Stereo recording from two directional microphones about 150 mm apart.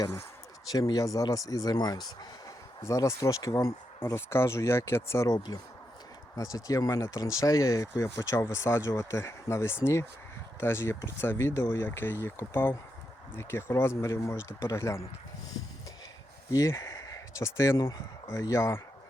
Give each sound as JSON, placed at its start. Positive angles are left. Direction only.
{"t": 0.7, "sound": "speech", "side_deg": 25}
{"t": 16.5, "sound": "speech", "side_deg": 20}